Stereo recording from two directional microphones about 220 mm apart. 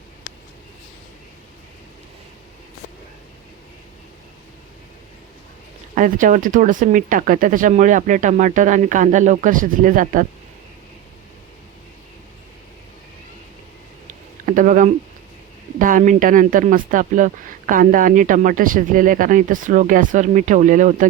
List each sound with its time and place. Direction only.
5.9 s speech: 35° right (ahead or behind)
14.1 s a sound: 35° right (ahead or behind)
15.8 s speech: 35° right (ahead or behind)